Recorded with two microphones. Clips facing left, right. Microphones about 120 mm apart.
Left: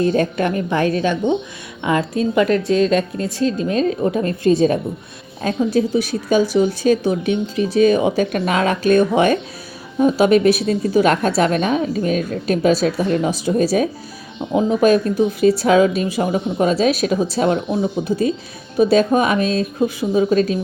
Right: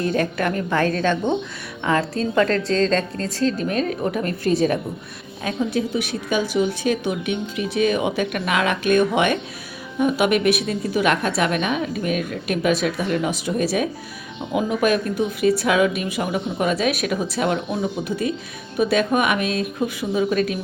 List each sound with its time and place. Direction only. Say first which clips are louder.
0.0 s a woman's voice: left 4 dB; 25° left (ahead or behind)
5.4 s speech: left 5 dB; 35° left (ahead or behind)